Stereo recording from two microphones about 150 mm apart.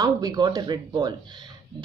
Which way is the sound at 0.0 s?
25° right (ahead or behind).